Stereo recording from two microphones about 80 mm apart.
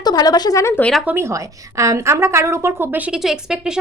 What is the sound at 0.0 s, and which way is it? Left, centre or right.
Speech, left.